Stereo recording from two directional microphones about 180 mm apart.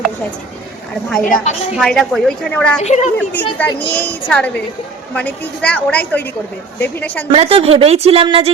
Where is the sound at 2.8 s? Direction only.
40° left (ahead or behind).